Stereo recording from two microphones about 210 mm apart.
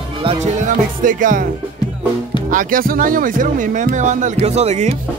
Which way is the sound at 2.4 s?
40° right (ahead or behind).